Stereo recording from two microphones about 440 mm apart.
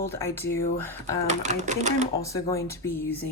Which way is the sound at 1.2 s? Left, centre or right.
Centre.